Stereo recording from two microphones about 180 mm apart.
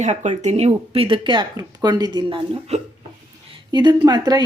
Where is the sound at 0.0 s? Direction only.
40° right (ahead or behind).